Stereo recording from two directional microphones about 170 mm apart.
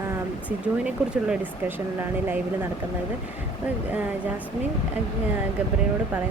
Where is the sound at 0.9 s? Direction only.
5° right (ahead or behind).